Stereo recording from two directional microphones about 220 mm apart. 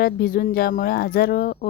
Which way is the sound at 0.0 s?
45° left (ahead or behind).